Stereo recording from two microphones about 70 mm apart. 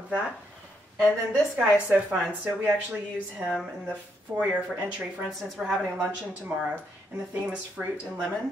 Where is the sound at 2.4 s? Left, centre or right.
Right.